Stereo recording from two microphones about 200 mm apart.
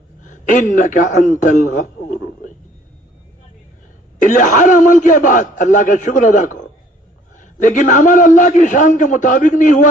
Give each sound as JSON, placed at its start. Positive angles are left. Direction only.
{"t": 0.2, "sound": "a man's voice", "side_deg": 40}
{"t": 4.2, "sound": "a man's voice", "side_deg": 40}